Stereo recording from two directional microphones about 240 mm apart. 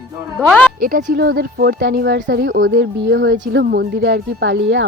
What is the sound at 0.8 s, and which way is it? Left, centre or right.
Speech, right.